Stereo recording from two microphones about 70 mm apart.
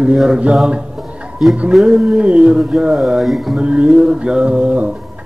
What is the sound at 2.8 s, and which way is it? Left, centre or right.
Speech, centre.